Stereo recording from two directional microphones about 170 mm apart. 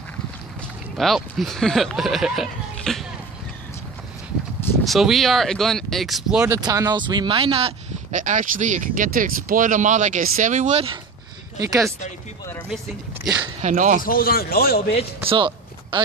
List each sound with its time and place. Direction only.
0.6 s speech: centre (ahead or behind)
4.8 s speech: centre (ahead or behind)
6.4 s speech: 20° right (ahead or behind)
8.1 s speech: 50° right (ahead or behind)
11.6 s speech: 20° right (ahead or behind)
13.6 s speech: 50° right (ahead or behind)
14.0 s a man's voice: 60° left (ahead or behind)
15.2 s walk: 30° right (ahead or behind)